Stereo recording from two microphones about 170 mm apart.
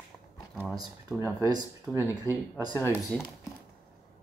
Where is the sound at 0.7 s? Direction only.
Centre (ahead or behind).